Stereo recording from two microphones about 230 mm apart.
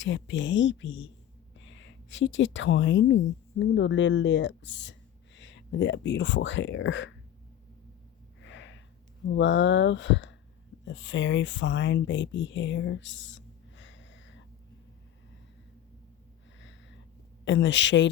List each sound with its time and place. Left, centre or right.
0.0 s a woman's voice: left
8.4 s snort: left
9.2 s speech: left
16.6 s a sound: left
17.4 s speech: left